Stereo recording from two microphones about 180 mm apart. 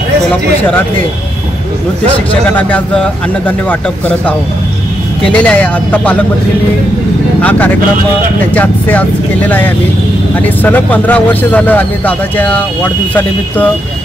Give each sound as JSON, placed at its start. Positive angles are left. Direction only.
{"t": 5.2, "sound": "speech", "side_deg": 5}
{"t": 7.4, "sound": "speech", "side_deg": 10}
{"t": 10.6, "sound": "speech", "side_deg": 10}